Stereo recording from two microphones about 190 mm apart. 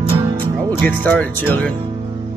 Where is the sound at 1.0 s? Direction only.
10° left (ahead or behind).